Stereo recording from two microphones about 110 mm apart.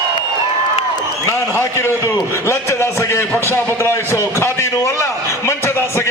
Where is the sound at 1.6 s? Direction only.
25° left (ahead or behind).